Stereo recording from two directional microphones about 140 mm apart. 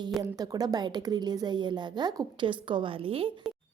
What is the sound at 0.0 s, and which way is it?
A woman's voice, 25° right (ahead or behind).